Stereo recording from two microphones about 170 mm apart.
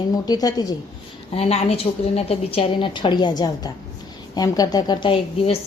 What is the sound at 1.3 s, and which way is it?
A woman's voice, 35° left (ahead or behind).